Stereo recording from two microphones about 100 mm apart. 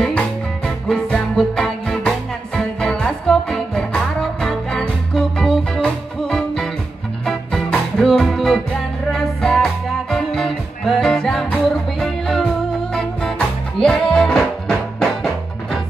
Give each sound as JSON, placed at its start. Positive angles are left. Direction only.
{"t": 0.0, "sound": "music", "side_deg": 10}
{"t": 13.7, "sound": "music", "side_deg": 5}